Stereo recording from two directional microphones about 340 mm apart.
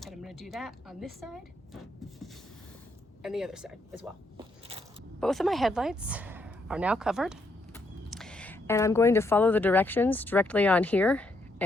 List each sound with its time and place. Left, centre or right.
0.0 s speech: centre
3.2 s speech: centre
5.2 s speech: centre